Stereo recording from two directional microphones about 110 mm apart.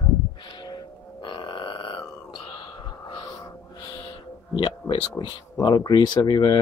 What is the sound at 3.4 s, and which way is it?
Music, 30° left (ahead or behind).